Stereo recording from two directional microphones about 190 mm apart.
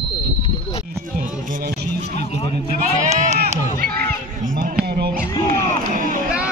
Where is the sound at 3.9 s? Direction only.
50° right (ahead or behind).